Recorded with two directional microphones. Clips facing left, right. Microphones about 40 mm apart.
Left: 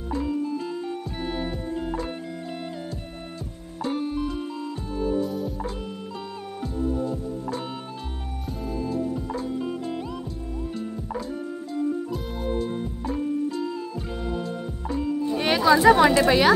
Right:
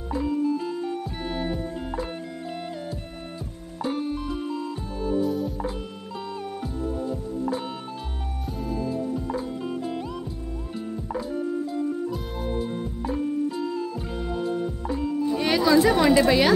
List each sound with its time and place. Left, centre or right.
0.1 s music: centre
3.8 s music: centre
8.6 s music: centre
9.6 s music: centre
15.2 s music: centre
15.8 s a woman's voice: centre